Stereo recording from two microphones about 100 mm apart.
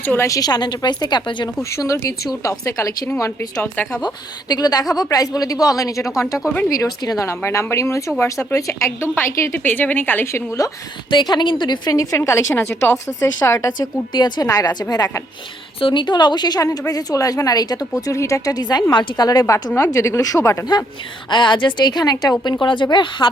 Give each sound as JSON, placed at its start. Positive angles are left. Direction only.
{"t": 0.0, "sound": "a woman's voice", "side_deg": 20}
{"t": 0.3, "sound": "a woman's voice", "side_deg": 40}
{"t": 1.7, "sound": "a woman's voice", "side_deg": 30}
{"t": 4.0, "sound": "a woman's voice", "side_deg": 45}
{"t": 11.1, "sound": "a woman's voice", "side_deg": 45}
{"t": 11.9, "sound": "a woman's voice", "side_deg": 30}
{"t": 15.8, "sound": "a woman's voice", "side_deg": 50}
{"t": 19.7, "sound": "a woman's voice", "side_deg": 30}
{"t": 21.2, "sound": "a woman's voice", "side_deg": 50}
{"t": 22.6, "sound": "a woman's voice", "side_deg": 50}